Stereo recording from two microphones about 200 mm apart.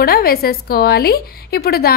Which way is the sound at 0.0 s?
50° left (ahead or behind).